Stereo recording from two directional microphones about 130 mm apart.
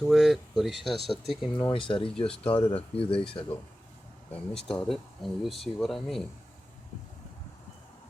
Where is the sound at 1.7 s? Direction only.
40° left (ahead or behind).